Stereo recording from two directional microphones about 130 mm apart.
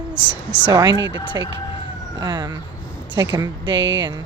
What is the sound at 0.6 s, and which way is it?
Speech, 35° right (ahead or behind).